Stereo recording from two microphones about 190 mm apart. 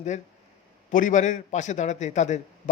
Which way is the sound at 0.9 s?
45° left (ahead or behind).